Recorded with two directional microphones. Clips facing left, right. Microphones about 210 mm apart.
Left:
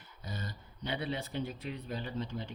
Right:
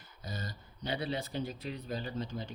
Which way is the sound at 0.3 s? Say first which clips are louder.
Even; 40° right (ahead or behind).